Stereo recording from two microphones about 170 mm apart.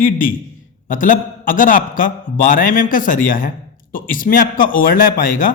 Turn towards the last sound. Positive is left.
turn(degrees=55)  # may be behind; listen again after turning